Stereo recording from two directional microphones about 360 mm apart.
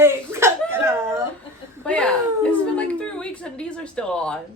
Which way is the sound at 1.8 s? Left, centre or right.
Centre.